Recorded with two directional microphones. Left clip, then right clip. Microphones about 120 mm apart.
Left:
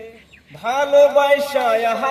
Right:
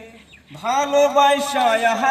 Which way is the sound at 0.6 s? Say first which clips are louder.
Left 3 dB; 15° left (ahead or behind).